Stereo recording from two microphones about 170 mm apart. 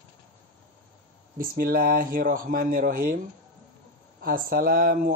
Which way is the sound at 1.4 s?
60° right (ahead or behind).